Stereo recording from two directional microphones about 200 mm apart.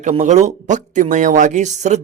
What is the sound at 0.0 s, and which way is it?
A man's voice, 35° right (ahead or behind).